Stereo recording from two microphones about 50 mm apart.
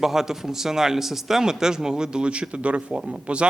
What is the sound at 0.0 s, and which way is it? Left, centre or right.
Speech, centre.